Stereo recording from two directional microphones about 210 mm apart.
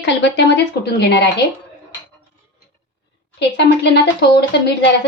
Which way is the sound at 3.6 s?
50° left (ahead or behind).